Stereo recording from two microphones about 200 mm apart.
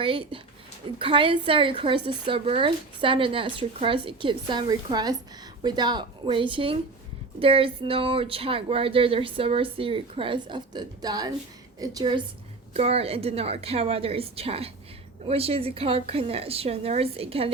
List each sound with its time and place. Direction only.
0.0 s speech: 25° right (ahead or behind)